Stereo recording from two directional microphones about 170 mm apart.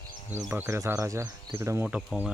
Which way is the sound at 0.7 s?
15° right (ahead or behind).